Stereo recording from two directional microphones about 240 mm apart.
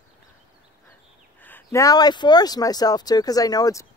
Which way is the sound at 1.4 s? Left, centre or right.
Centre.